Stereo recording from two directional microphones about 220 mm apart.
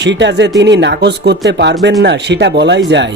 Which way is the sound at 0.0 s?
55° right (ahead or behind).